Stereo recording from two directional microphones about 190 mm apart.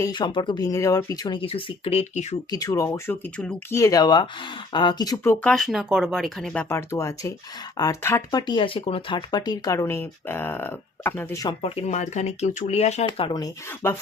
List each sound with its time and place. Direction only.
0.0 s speech: 25° left (ahead or behind)
2.5 s speech: 20° left (ahead or behind)
11.6 s speech: 35° left (ahead or behind); by 13.9 s 15° left (ahead or behind)